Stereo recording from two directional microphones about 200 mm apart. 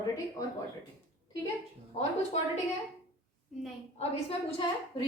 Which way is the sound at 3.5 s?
Centre (ahead or behind).